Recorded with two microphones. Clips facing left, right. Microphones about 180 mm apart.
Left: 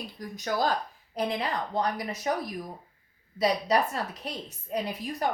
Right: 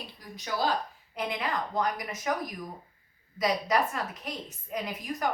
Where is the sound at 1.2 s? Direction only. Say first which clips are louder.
Left 2 dB; 35° left (ahead or behind).